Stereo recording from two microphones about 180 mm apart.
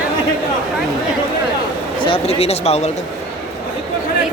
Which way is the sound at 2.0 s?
30° left (ahead or behind).